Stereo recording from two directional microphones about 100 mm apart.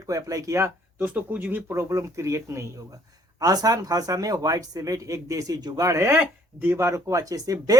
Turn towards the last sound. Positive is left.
turn(degrees=-35)  # may be behind; listen again after turning